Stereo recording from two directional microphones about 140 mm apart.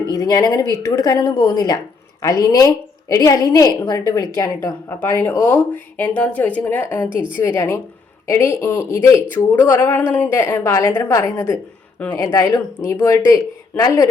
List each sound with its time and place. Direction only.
0.1 s a woman's voice: 25° left (ahead or behind)